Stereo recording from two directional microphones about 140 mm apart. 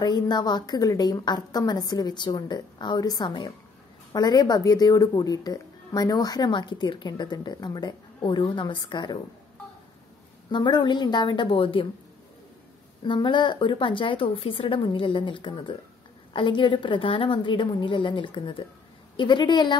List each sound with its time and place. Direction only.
0.0 s a woman's voice: 30° left (ahead or behind)
10.5 s a woman's voice: 30° left (ahead or behind)
13.0 s a woman's voice: 35° left (ahead or behind)